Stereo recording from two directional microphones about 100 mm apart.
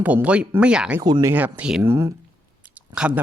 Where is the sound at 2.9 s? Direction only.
10° right (ahead or behind).